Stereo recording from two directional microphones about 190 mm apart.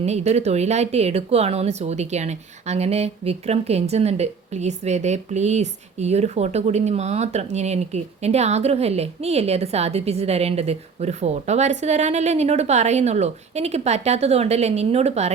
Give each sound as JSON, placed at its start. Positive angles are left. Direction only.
{"t": 0.0, "sound": "a woman's voice", "side_deg": -35}